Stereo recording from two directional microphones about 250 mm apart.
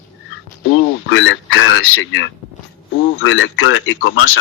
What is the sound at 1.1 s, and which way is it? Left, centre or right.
Speech, left.